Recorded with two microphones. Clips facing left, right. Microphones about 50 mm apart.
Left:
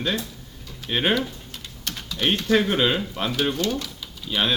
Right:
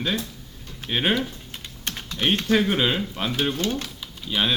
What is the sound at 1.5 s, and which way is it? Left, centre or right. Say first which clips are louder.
Typing: right 2 dB; right.